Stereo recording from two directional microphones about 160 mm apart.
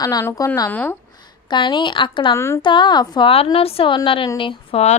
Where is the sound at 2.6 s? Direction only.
30° left (ahead or behind).